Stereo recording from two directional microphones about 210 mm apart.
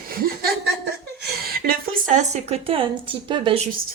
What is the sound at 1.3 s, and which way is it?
A woman's voice, 45° right (ahead or behind).